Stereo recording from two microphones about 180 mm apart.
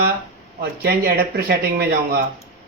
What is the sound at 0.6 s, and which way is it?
Speech, 60° right (ahead or behind).